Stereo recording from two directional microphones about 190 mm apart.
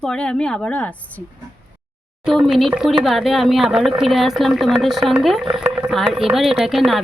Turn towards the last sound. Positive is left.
turn(degrees=0)  # may be behind; listen again after turning